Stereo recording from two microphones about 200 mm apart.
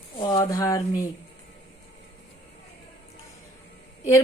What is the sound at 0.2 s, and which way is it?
Speech, 20° left (ahead or behind).